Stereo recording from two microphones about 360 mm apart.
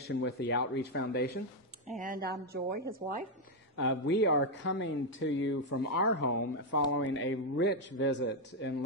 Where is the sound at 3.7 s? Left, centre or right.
Left.